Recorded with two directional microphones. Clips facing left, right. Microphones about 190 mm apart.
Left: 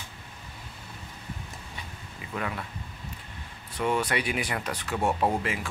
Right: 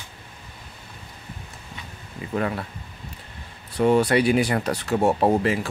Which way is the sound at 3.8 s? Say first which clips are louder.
Right 9 dB; 35° right (ahead or behind).